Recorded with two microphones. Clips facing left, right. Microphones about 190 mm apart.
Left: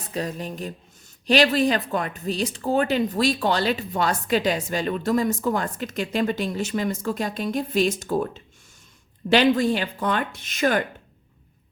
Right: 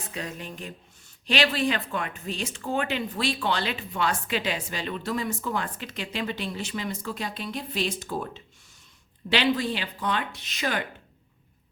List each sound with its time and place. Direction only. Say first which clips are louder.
0.1 s speech: left 8 dB; 35° left (ahead or behind)